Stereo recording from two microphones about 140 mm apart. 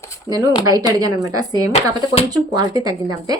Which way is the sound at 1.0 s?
25° right (ahead or behind).